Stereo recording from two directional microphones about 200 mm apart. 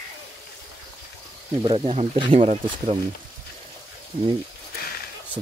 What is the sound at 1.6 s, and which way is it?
Speech, 25° right (ahead or behind).